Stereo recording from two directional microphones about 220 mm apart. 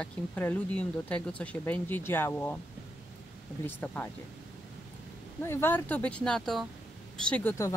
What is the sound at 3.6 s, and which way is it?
Speech, 5° left (ahead or behind).